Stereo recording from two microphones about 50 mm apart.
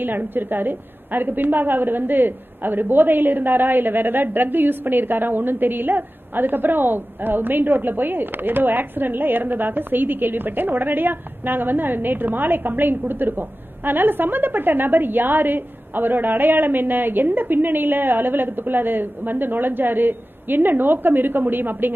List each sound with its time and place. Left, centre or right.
0.0 s a woman's voice: right